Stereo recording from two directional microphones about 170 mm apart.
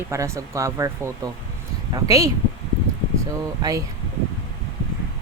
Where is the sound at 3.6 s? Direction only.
20° right (ahead or behind).